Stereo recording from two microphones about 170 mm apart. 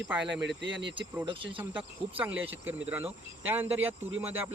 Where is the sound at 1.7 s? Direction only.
10° right (ahead or behind).